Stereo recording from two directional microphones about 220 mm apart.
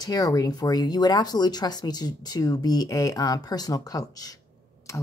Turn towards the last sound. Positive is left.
turn(degrees=15)  # may be behind; listen again after turning